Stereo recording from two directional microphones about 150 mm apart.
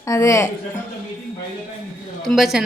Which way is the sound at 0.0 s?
20° left (ahead or behind).